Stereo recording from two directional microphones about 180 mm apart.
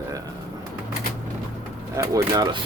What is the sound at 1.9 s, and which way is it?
Speech, 20° right (ahead or behind).